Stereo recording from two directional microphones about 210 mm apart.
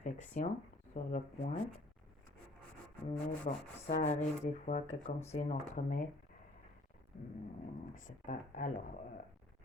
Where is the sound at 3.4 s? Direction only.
30° left (ahead or behind).